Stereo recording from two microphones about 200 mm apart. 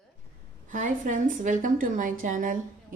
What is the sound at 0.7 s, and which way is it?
A woman's voice, 40° right (ahead or behind).